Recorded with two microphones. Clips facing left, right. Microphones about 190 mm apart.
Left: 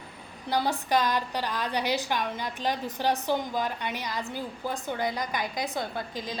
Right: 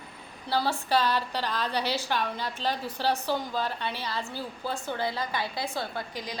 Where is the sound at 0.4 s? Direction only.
15° left (ahead or behind).